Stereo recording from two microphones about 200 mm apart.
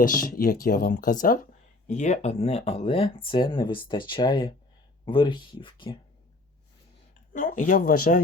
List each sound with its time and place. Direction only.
0.0 s speech: 45° left (ahead or behind); by 6.0 s 25° left (ahead or behind)
7.3 s speech: 40° left (ahead or behind)